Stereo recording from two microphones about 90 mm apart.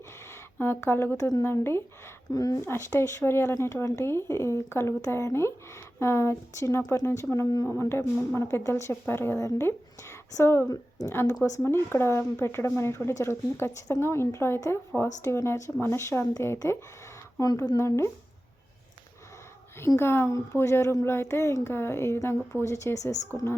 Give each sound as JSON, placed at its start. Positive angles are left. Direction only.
{"t": 0.6, "sound": "speech", "side_deg": 25}
{"t": 1.1, "sound": "a woman's voice", "side_deg": 35}
{"t": 2.3, "sound": "a woman's voice", "side_deg": 40}
{"t": 2.6, "sound": "a woman's voice", "side_deg": 30}
{"t": 17.7, "sound": "a woman's voice", "side_deg": 30}
{"t": 20.0, "sound": "speech", "side_deg": 30}